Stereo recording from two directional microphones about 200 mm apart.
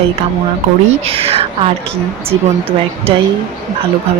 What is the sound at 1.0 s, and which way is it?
Speech, 30° right (ahead or behind).